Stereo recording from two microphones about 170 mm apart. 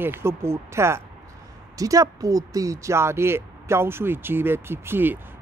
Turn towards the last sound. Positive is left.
turn(degrees=-10)  # may be behind; listen again after turning